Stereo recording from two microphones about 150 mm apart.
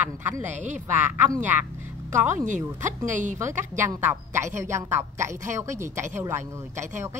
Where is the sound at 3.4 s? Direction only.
20° right (ahead or behind).